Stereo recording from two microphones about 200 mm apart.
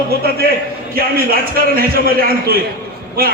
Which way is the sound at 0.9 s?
50° right (ahead or behind).